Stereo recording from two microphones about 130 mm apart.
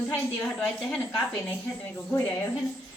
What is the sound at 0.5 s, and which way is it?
Speech, 5° left (ahead or behind).